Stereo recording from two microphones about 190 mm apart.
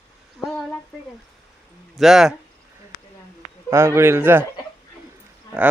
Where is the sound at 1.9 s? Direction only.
Centre (ahead or behind).